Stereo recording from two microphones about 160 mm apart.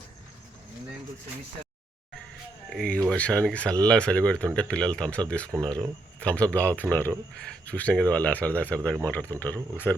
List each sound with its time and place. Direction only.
2.6 s speech: 5° left (ahead or behind)